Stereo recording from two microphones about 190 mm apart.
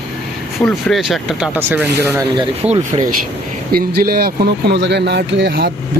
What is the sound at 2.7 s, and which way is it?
Speech, 40° right (ahead or behind).